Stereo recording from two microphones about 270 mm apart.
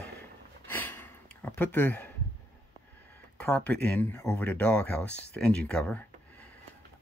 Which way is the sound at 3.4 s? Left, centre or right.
Centre.